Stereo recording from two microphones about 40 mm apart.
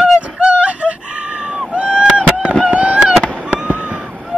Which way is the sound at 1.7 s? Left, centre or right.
Right.